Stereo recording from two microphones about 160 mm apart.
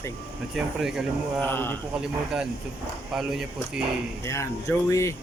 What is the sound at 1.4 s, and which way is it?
Speech, 15° left (ahead or behind).